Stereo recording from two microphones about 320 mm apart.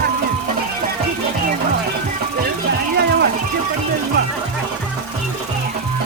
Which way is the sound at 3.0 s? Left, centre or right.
Right.